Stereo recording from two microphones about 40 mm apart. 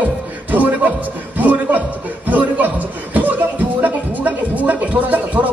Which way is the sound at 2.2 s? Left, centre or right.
Right.